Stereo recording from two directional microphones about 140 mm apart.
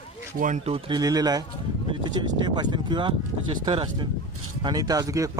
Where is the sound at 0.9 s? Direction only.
30° right (ahead or behind).